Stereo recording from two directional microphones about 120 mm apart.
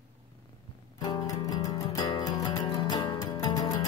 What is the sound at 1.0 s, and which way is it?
Music, 35° left (ahead or behind).